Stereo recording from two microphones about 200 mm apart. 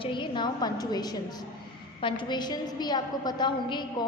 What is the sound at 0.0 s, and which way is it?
A woman's voice, 25° left (ahead or behind).